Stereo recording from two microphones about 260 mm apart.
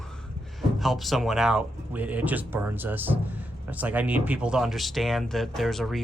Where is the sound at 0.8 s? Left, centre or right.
Centre.